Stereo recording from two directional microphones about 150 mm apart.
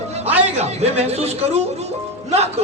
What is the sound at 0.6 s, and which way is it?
A man's voice, 45° right (ahead or behind).